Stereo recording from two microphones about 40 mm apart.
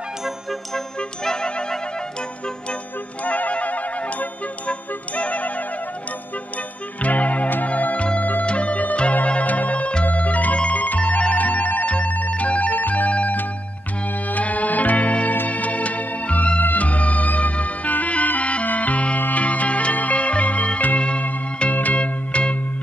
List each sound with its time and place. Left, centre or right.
0.5 s music: centre
3.3 s music: left
7.0 s music: left
12.1 s ringtone: left
14.3 s music: left